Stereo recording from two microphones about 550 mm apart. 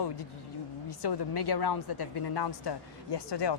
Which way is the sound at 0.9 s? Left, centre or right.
Left.